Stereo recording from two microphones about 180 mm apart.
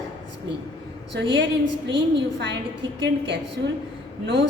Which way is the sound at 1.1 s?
85° right.